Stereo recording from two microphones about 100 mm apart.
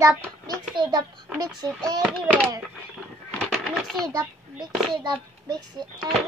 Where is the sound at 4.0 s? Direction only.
40° right (ahead or behind).